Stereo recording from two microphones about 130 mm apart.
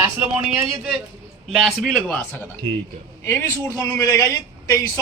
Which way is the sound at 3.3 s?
20° left (ahead or behind).